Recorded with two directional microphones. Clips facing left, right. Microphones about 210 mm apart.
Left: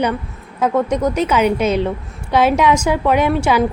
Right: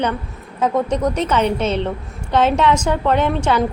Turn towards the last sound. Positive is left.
turn(degrees=10)  # may be behind; listen again after turning